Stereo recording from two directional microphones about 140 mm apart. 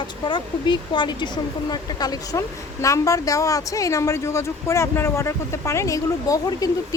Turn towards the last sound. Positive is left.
turn(degrees=25)  # may be behind; listen again after turning